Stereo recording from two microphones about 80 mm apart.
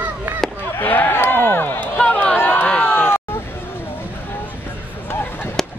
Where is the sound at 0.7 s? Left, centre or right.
Left.